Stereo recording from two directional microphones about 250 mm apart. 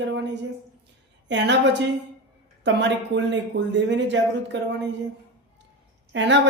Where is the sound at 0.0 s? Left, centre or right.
Right.